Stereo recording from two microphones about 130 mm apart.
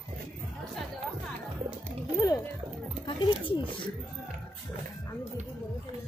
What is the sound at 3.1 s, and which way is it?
Speech, 35° left (ahead or behind).